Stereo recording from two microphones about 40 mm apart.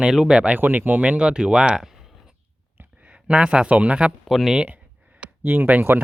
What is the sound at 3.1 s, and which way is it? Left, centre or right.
Speech, right.